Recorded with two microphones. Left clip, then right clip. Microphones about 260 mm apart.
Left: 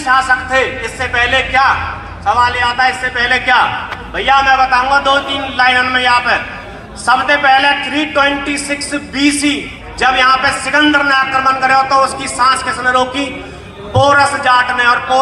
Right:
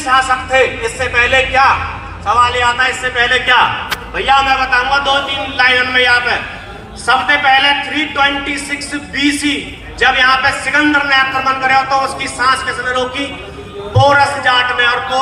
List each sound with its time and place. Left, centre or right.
0.5 s a man's voice: centre